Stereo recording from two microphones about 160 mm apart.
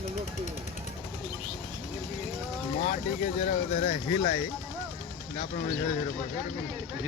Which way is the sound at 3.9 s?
35° left (ahead or behind).